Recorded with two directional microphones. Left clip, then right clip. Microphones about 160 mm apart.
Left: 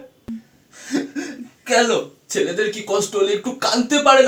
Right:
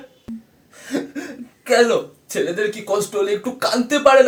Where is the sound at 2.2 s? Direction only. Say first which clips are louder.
Left 1 dB; 35° right (ahead or behind).